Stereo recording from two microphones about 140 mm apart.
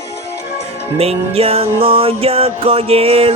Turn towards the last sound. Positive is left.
turn(degrees=-45)  # may be behind; listen again after turning